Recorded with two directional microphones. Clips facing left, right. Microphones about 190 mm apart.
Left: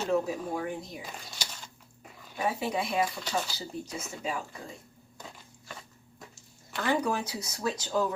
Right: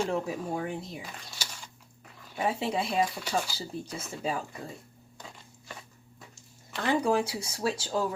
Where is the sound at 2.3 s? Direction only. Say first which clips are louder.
Right 1 dB; 25° right (ahead or behind).